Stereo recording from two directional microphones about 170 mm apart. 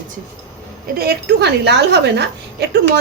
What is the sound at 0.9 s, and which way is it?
A woman's voice, 65° right (ahead or behind).